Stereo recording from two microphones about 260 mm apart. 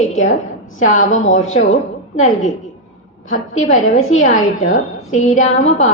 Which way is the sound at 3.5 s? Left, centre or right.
Left.